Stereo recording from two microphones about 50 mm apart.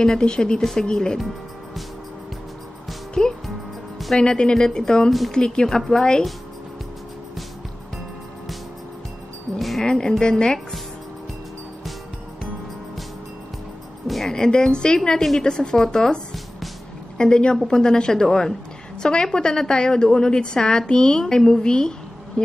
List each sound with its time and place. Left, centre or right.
0.0 s a woman's voice: centre
0.6 s a woman's voice: centre
3.2 s a woman's voice: centre
4.2 s a woman's voice: centre
9.6 s music: centre
9.8 s a woman's voice: centre
14.0 s speech: centre
14.3 s a woman's voice: centre
17.2 s a woman's voice: centre